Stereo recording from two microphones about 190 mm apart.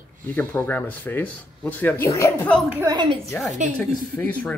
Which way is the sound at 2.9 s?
25° right (ahead or behind).